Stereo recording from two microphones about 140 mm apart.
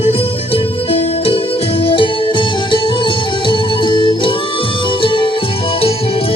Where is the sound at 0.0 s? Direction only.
45° left (ahead or behind).